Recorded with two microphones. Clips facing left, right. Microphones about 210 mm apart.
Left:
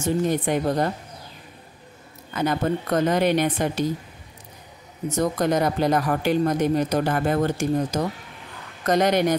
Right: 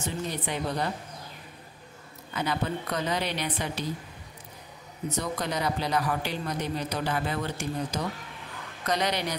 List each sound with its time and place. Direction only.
0.0 s speech: 50° left (ahead or behind)
2.3 s speech: 45° left (ahead or behind)
5.1 s speech: 45° left (ahead or behind)